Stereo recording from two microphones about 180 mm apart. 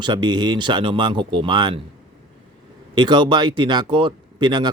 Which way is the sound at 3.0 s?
25° right (ahead or behind).